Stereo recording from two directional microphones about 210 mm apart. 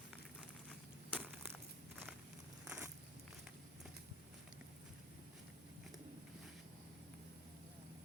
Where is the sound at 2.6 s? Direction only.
15° right (ahead or behind).